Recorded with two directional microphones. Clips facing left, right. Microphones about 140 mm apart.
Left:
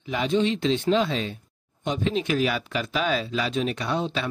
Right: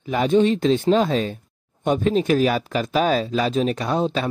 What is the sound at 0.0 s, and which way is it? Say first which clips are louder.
Speech: right 6 dB; 45° right (ahead or behind).